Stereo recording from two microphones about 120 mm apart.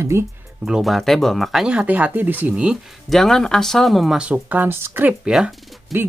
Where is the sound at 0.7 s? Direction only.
Centre (ahead or behind).